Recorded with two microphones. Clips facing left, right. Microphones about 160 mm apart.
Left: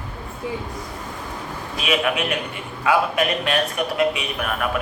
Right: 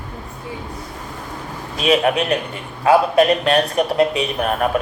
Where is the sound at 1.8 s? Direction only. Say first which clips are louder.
Right 6 dB; 35° right (ahead or behind).